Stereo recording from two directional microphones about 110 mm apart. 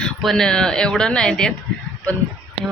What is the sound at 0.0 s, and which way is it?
Speech, 5° left (ahead or behind).